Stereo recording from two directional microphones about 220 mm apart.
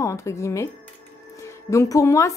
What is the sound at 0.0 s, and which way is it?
A woman's voice, 15° left (ahead or behind).